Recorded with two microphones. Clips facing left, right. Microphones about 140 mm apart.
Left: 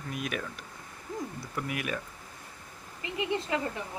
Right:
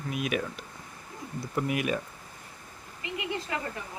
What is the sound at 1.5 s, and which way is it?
Speech, 25° right (ahead or behind).